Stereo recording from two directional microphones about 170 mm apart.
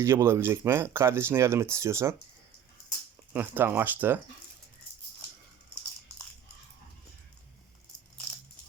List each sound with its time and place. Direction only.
0.0 s speech: 15° right (ahead or behind)
3.3 s speech: 10° right (ahead or behind)